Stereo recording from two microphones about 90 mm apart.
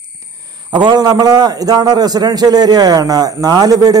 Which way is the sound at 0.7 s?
50° right (ahead or behind).